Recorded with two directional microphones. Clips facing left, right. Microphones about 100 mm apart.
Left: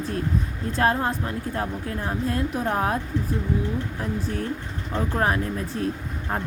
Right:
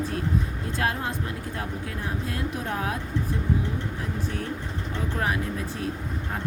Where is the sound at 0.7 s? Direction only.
40° left (ahead or behind).